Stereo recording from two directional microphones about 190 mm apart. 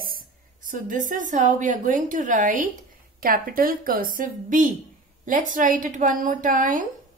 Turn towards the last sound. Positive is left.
turn(degrees=-45)  # may be behind; listen again after turning